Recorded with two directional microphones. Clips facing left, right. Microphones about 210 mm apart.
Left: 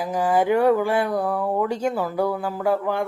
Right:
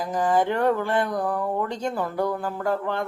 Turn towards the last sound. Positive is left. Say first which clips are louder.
# left 3 dB
turn(degrees=10)  # may be behind; listen again after turning